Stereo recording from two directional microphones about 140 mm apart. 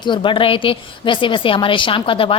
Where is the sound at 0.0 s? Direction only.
35° left (ahead or behind).